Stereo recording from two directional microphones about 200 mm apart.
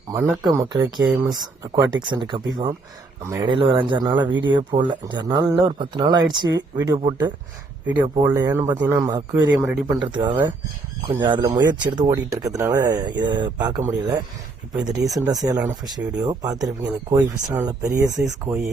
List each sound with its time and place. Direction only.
0.1 s a man's voice: 15° right (ahead or behind)